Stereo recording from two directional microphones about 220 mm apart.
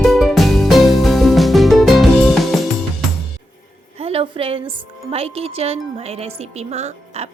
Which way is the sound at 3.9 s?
25° right (ahead or behind).